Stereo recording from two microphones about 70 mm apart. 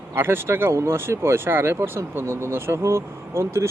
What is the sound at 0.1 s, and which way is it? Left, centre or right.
Speech, right.